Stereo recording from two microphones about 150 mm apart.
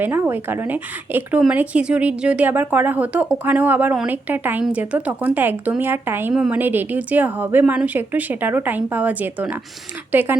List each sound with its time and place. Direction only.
0.0 s speech: 15° right (ahead or behind)